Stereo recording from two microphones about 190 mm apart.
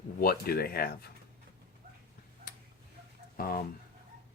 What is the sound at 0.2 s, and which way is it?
Speech, 55° left (ahead or behind).